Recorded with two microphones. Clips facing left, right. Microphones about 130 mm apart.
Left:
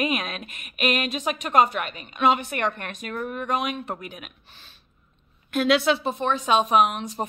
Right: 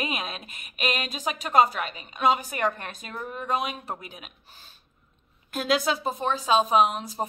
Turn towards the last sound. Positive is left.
turn(degrees=-35)  # may be behind; listen again after turning